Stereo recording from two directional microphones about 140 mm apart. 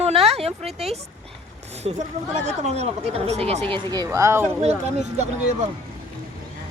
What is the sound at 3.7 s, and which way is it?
Speech, 30° right (ahead or behind).